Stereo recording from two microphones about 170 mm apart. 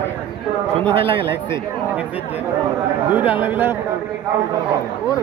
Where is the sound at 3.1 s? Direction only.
10° right (ahead or behind).